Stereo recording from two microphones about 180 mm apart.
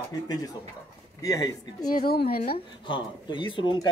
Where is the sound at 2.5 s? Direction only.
25° left (ahead or behind).